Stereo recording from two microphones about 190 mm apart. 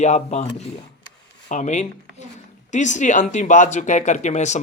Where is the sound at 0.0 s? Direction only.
35° left (ahead or behind).